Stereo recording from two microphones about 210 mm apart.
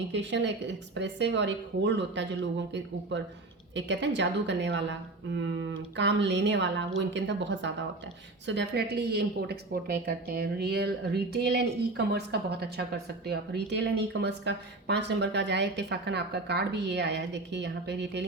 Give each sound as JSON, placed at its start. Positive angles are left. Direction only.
{"t": 0.1, "sound": "a woman's voice", "side_deg": -55}